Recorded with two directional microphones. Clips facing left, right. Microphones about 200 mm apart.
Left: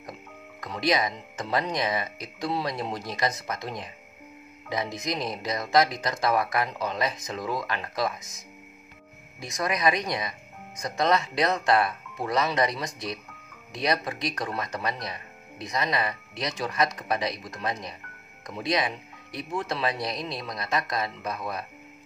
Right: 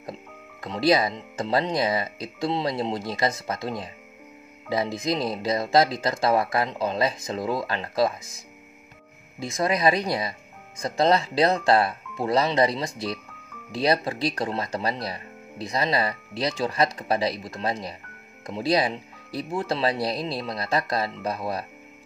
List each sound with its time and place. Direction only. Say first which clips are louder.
0.6 s speech: right 5 dB; 30° right (ahead or behind)